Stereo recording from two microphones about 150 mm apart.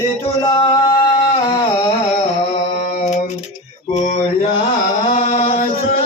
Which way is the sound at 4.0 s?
50° left (ahead or behind).